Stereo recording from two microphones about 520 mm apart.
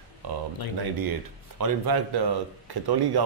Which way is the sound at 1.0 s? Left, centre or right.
Right.